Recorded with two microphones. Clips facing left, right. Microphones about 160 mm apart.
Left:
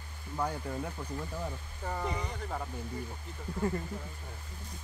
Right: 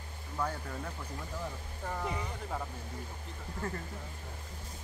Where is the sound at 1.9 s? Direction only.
Centre (ahead or behind).